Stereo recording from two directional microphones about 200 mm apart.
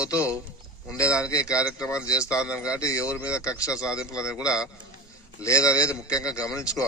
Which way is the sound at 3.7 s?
5° right (ahead or behind).